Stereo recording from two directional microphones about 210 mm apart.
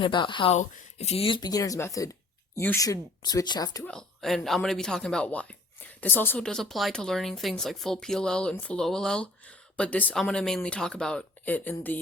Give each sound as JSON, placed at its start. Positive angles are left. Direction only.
{"t": 0.0, "sound": "speech", "side_deg": 20}
{"t": 3.8, "sound": "speech", "side_deg": 0}